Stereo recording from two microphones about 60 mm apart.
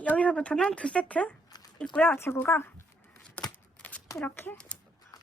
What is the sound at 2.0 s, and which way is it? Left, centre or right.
Speech, left.